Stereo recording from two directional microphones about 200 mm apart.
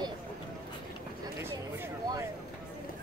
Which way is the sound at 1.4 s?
10° right (ahead or behind).